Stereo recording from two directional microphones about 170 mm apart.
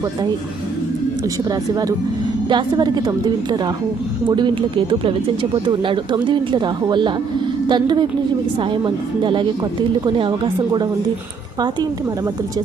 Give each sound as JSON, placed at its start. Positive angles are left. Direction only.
{"t": 1.5, "sound": "speech", "side_deg": -20}